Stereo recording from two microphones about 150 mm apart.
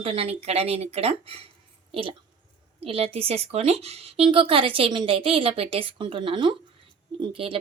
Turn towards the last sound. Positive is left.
turn(degrees=-40)  # may be behind; listen again after turning